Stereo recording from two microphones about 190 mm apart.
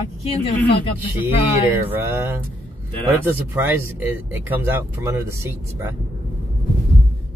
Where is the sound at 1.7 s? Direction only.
10° right (ahead or behind).